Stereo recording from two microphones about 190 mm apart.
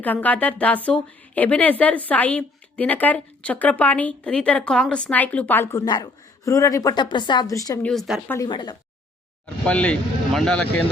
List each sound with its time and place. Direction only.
0.0 s speech: 10° left (ahead or behind)
7.8 s speech: 5° left (ahead or behind)
8.3 s speech: 20° left (ahead or behind)
9.6 s speech: 5° left (ahead or behind)